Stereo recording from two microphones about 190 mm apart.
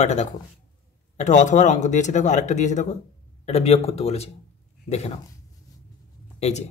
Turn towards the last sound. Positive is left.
turn(degrees=35)  # may be behind; listen again after turning